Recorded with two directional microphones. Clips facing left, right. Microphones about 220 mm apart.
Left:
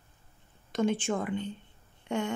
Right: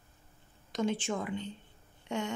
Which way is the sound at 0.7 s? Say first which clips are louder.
Left 4 dB; 50° left (ahead or behind).